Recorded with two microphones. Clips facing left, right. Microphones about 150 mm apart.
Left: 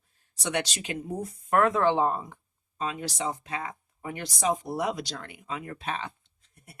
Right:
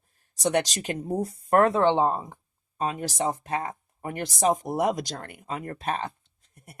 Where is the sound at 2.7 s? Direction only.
45° right (ahead or behind).